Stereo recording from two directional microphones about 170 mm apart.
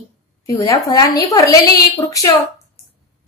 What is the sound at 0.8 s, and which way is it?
A woman's voice, 20° left (ahead or behind).